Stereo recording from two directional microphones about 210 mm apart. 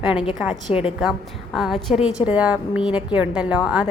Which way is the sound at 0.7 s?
30° left (ahead or behind).